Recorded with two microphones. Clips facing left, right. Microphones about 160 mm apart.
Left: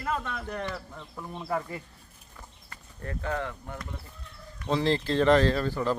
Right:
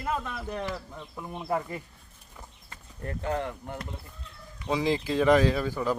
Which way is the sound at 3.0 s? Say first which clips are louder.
Right 2 dB; 20° right (ahead or behind).